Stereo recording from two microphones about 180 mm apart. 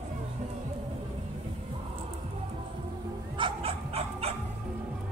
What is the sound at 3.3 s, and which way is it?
Bow-wow, 30° right (ahead or behind).